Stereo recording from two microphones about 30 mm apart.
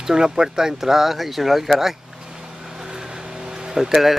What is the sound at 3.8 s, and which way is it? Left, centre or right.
Speech, centre.